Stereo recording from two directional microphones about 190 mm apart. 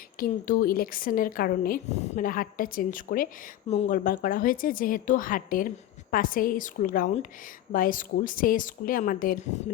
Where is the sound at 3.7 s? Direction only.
35° left (ahead or behind).